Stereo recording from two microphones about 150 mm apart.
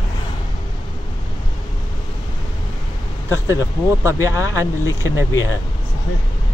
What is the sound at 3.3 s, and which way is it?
Speech, 20° right (ahead or behind).